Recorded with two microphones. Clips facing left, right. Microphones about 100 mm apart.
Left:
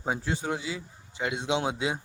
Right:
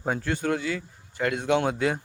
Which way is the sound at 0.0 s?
10° left (ahead or behind).